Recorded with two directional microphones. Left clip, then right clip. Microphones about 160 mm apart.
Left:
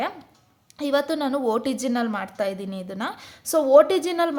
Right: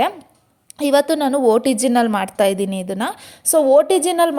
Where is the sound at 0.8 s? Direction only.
35° right (ahead or behind).